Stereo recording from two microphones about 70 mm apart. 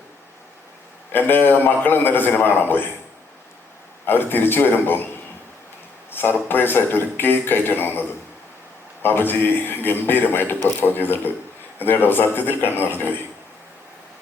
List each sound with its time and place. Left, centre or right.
1.1 s a man's voice: left
4.0 s a man's voice: left
6.1 s a man's voice: left